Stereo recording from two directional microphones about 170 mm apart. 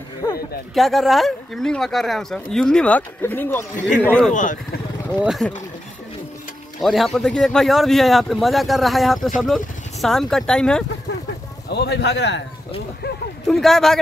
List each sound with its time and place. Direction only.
0.7 s speech: centre (ahead or behind)
4.3 s speech: 50° left (ahead or behind)
5.2 s speech: centre (ahead or behind)
6.8 s speech: centre (ahead or behind)
11.7 s speech: 75° left (ahead or behind)
13.5 s speech: centre (ahead or behind)